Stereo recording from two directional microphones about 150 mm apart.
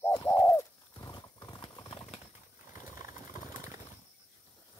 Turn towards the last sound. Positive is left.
turn(degrees=60)  # may be behind; listen again after turning